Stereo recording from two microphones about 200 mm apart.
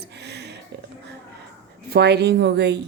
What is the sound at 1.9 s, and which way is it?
Speech, 55° right (ahead or behind).